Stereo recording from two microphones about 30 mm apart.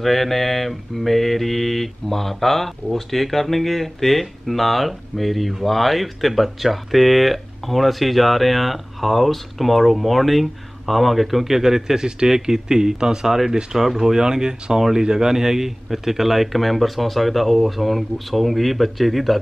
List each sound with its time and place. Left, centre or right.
0.0 s mantra: centre
12.2 s speech: centre
14.9 s mantra: right; by 19.4 s centre